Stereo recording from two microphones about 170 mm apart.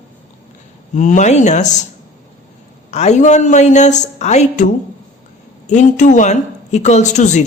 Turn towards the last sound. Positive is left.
turn(degrees=45)  # may be behind; listen again after turning